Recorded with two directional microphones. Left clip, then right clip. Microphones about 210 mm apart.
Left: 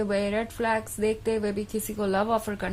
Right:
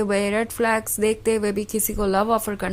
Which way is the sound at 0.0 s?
25° right (ahead or behind).